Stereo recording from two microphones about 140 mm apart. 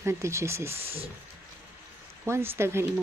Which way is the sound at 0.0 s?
20° right (ahead or behind).